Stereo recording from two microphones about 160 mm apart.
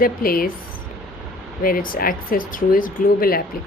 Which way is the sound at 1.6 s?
60° left (ahead or behind).